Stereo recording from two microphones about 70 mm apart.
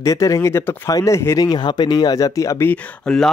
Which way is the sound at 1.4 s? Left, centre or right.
Left.